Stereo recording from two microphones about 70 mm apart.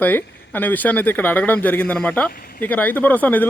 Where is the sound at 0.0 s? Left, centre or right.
Left.